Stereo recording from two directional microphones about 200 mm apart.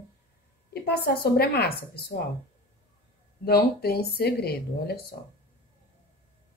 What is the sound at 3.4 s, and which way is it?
Speech, 50° left (ahead or behind).